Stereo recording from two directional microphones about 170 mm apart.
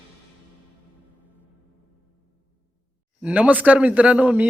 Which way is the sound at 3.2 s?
10° right (ahead or behind).